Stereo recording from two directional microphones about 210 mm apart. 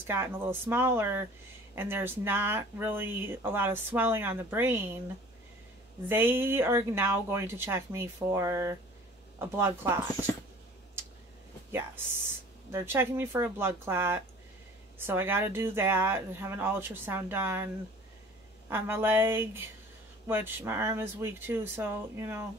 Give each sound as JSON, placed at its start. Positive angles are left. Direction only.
{"t": 0.0, "sound": "speech", "side_deg": -10}
{"t": 6.0, "sound": "speech", "side_deg": -10}
{"t": 11.7, "sound": "speech", "side_deg": -10}
{"t": 18.7, "sound": "speech", "side_deg": -10}